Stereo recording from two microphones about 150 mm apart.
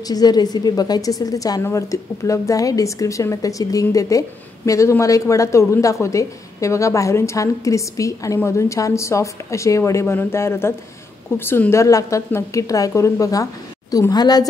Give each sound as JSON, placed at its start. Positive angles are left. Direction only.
{"t": 0.1, "sound": "a woman's voice", "side_deg": 25}